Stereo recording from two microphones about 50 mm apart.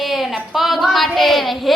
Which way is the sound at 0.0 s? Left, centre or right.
Centre.